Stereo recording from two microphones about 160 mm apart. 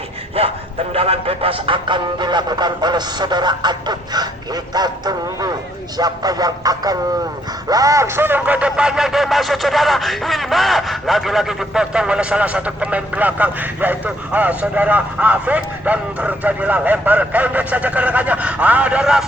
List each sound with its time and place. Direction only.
0.9 s speech: 40° right (ahead or behind); by 19.2 s 5° right (ahead or behind)